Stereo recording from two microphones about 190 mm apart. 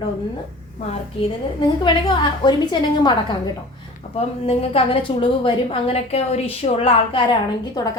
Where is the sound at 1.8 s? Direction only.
25° left (ahead or behind).